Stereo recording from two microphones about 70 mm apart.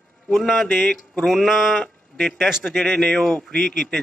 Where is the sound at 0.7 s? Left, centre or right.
Centre.